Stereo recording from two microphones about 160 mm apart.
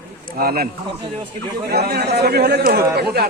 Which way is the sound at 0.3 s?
70° right (ahead or behind).